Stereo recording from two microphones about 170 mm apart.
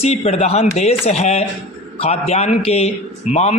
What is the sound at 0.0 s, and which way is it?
A man's voice, 40° left (ahead or behind).